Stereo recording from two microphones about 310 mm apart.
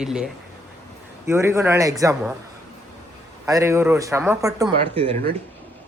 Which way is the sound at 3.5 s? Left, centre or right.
Centre.